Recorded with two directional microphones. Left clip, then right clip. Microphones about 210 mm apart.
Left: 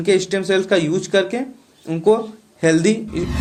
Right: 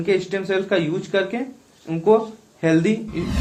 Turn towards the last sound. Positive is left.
turn(degrees=45)  # may be behind; listen again after turning